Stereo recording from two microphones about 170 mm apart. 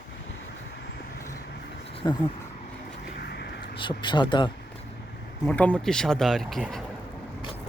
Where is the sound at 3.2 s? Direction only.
70° left (ahead or behind).